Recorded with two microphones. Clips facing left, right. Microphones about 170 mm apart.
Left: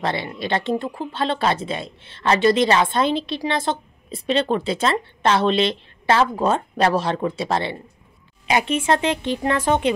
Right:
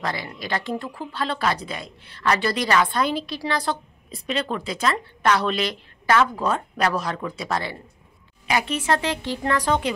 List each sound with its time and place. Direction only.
0.0 s speech: 25° left (ahead or behind)